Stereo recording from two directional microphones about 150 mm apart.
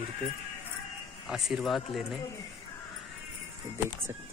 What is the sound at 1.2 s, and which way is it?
Speech, centre (ahead or behind).